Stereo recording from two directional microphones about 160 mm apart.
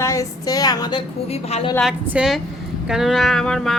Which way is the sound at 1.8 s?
Centre (ahead or behind).